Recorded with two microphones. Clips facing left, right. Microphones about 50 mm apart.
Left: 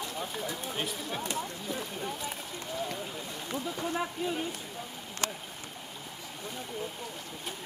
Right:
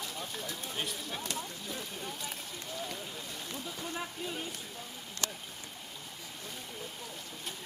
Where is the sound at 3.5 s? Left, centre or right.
Left.